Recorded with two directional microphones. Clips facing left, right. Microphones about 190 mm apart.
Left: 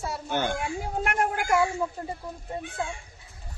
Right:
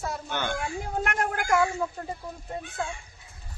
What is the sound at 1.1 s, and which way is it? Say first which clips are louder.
Speech: left 2 dB; 10° left (ahead or behind).